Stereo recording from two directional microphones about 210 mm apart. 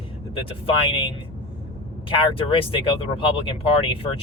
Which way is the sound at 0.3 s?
25° left (ahead or behind).